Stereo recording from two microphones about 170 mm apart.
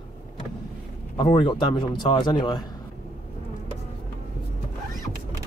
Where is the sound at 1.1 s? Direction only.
30° left (ahead or behind).